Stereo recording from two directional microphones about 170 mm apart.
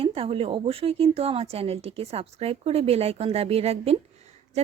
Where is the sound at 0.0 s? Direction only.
35° right (ahead or behind).